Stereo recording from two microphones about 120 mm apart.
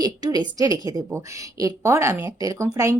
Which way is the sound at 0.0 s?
35° right (ahead or behind).